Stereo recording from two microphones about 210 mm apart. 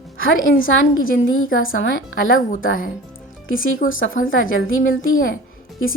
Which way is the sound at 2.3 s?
40° left (ahead or behind).